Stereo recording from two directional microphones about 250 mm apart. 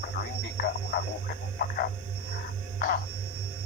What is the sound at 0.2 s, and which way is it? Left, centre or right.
Radio, left.